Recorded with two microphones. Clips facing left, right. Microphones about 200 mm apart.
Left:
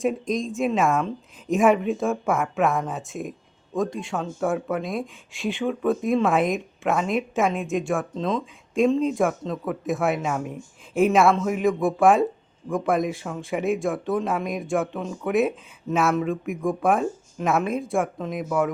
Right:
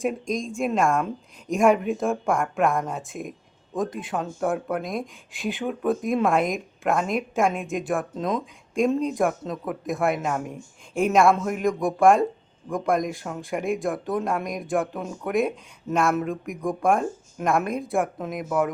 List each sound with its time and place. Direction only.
0.0 s speech: centre (ahead or behind)
8.7 s speech: centre (ahead or behind)